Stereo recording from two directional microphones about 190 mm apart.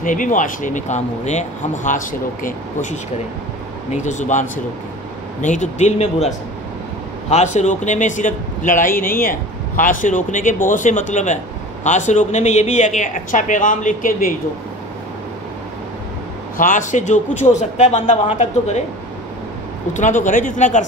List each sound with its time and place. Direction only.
0.0 s a man's voice: 45° left (ahead or behind)
16.5 s a man's voice: 45° left (ahead or behind)
19.9 s a man's voice: 40° left (ahead or behind)